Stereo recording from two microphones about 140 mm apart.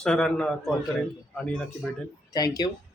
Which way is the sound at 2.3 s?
25° left (ahead or behind).